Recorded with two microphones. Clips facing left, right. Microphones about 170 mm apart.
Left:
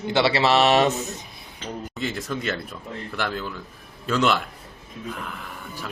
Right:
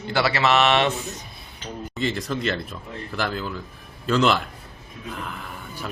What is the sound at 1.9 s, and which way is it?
Speech, centre (ahead or behind).